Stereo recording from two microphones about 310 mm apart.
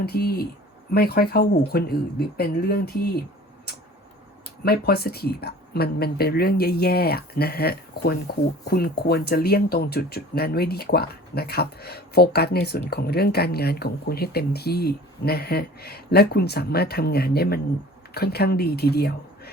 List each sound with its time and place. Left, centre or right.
0.0 s speech: left
4.6 s speech: left